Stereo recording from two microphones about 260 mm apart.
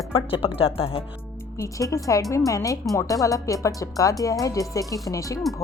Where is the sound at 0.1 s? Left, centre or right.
Centre.